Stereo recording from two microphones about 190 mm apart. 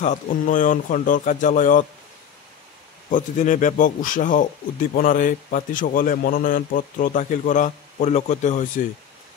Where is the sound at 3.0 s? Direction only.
40° left (ahead or behind).